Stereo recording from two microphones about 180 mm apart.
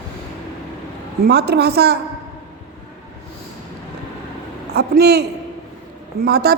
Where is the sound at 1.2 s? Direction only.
65° right (ahead or behind).